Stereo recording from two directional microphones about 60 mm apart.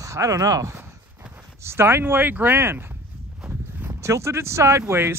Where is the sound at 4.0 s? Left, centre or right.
Right.